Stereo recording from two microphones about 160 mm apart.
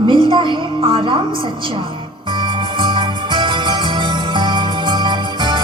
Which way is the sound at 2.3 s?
30° right (ahead or behind).